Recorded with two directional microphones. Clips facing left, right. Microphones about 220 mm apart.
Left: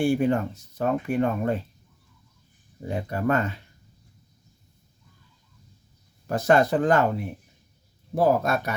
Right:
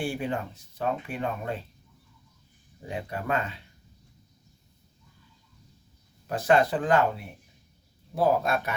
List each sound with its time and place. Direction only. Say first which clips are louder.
0.0 s speech: left 8 dB; 45° left (ahead or behind)
2.8 s speech: left 7 dB; 45° left (ahead or behind)
6.2 s speech: left 2 dB; 45° left (ahead or behind)
8.1 s speech: left 3 dB; 40° left (ahead or behind)